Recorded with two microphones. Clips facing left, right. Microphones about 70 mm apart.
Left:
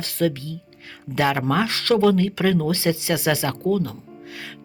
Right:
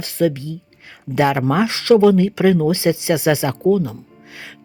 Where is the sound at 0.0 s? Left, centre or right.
Centre.